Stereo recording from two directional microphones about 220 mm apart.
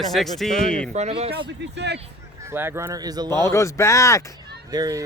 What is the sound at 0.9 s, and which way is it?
Speech, 30° right (ahead or behind).